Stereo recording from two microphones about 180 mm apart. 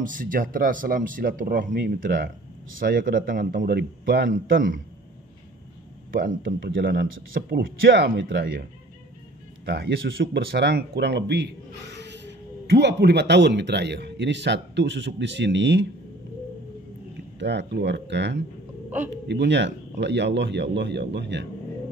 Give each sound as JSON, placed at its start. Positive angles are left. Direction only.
{"t": 0.0, "sound": "speech", "side_deg": -50}
{"t": 6.1, "sound": "speech", "side_deg": -55}
{"t": 6.6, "sound": "speech", "side_deg": -75}
{"t": 9.7, "sound": "speech", "side_deg": -65}
{"t": 17.4, "sound": "speech", "side_deg": -75}